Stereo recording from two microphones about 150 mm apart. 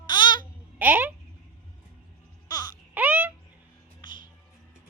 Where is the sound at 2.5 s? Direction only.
25° left (ahead or behind).